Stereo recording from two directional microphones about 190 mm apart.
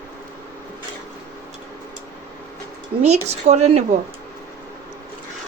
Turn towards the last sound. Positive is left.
turn(degrees=-35)  # may be behind; listen again after turning